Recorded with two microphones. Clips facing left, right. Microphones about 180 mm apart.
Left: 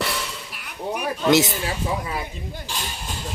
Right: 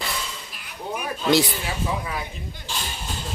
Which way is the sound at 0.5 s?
65° left (ahead or behind).